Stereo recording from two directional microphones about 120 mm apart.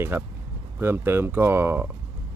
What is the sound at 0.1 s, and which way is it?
Speech, 20° right (ahead or behind).